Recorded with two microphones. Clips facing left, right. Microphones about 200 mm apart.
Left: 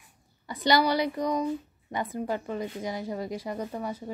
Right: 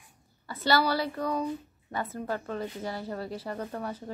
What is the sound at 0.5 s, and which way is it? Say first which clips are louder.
Speech: left 2 dB; 15° left (ahead or behind).